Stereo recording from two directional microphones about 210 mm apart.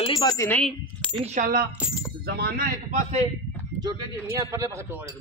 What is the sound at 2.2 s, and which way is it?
A man's voice, 50° right (ahead or behind).